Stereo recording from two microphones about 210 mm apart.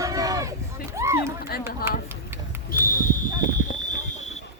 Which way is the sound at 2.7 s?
40° left (ahead or behind).